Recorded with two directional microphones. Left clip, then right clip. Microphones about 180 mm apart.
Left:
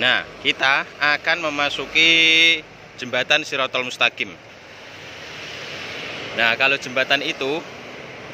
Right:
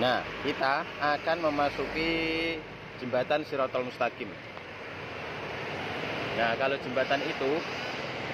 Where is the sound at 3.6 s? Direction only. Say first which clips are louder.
Left 9 dB; 45° left (ahead or behind).